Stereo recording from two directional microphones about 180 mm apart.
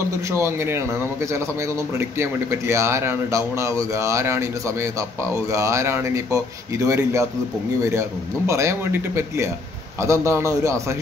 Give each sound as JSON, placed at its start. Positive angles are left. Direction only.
{"t": 0.3, "sound": "a man's voice", "side_deg": -15}
{"t": 8.5, "sound": "a man's voice", "side_deg": -15}